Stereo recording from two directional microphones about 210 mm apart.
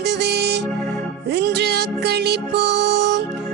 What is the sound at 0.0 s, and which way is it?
Music, 50° right (ahead or behind).